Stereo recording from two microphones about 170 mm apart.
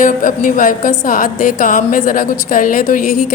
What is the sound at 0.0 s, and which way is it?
A woman's voice, 50° left (ahead or behind).